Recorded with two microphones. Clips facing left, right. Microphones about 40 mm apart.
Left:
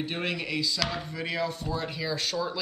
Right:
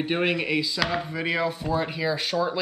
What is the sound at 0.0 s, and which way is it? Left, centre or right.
Speech, right.